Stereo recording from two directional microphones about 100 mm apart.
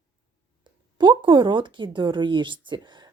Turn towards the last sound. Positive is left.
turn(degrees=-45)  # may be behind; listen again after turning